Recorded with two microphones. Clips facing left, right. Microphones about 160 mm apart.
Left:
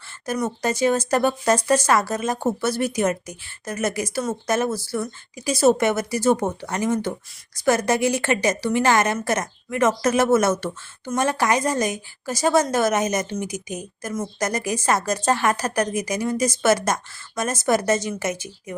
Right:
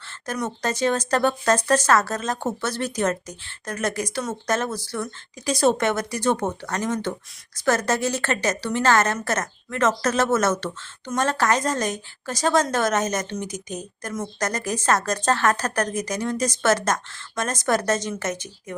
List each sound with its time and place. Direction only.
0.3 s a woman's voice: 5° left (ahead or behind)